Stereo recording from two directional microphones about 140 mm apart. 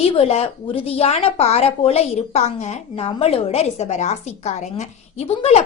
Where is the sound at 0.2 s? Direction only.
45° left (ahead or behind).